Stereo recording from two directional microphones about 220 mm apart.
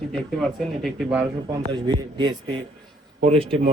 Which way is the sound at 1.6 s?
20° right (ahead or behind).